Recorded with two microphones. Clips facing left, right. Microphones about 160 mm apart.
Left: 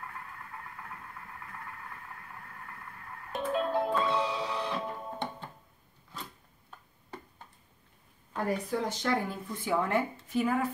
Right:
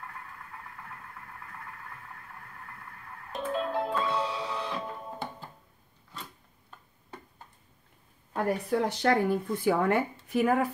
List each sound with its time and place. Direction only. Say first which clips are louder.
3.3 s music: left 1 dB; centre (ahead or behind)
8.6 s speech: right 5 dB; 65° right (ahead or behind)